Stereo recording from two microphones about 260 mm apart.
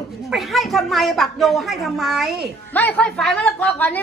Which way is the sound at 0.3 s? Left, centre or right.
Centre.